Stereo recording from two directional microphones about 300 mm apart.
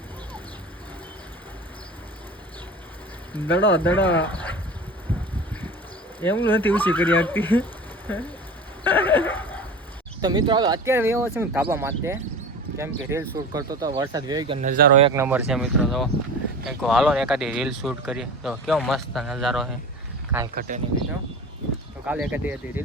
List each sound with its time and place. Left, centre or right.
3.3 s speech: centre
6.1 s speech: centre
8.8 s a sound: centre
10.2 s speech: centre
15.0 s speech: centre
20.6 s speech: right
22.0 s speech: centre